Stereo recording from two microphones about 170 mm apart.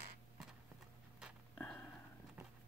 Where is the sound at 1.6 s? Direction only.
10° left (ahead or behind).